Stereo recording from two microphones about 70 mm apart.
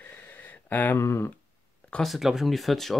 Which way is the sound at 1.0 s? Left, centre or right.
Left.